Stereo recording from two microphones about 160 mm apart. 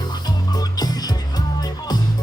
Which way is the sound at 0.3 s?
25° left (ahead or behind).